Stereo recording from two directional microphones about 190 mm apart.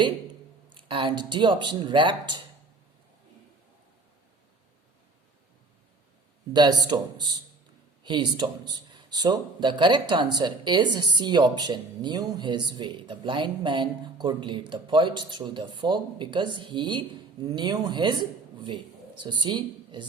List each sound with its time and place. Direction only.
0.7 s speech: 25° right (ahead or behind)
6.5 s speech: 20° right (ahead or behind)